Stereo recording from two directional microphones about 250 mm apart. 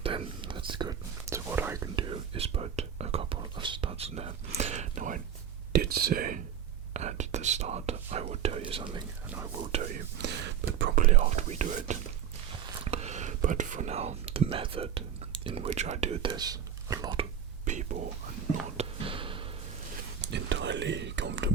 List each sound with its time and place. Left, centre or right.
0.0 s whispering: right
9.2 s whispering: centre
10.2 s a sound: right
10.9 s whispering: right
17.7 s whispering: right
18.8 s a sound: right
20.2 s whispering: right